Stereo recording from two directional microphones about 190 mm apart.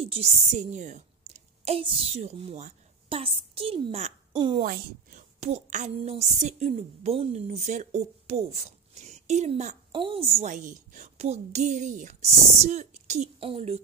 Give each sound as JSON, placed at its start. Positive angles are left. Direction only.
{"t": 0.0, "sound": "a woman's voice", "side_deg": -30}
{"t": 4.6, "sound": "a child's voice", "side_deg": -40}